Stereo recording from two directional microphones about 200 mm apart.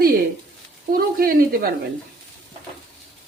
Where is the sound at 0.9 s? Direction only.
50° right (ahead or behind).